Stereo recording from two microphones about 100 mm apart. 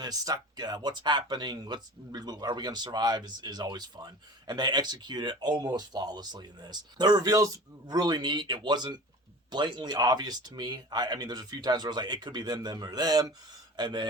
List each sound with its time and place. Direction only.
0.0 s speech: 40° right (ahead or behind)